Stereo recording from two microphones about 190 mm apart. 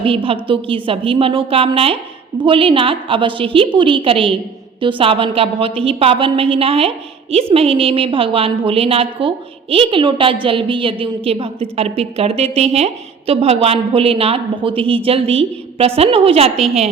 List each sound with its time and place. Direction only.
0.0 s a woman's voice: 30° right (ahead or behind)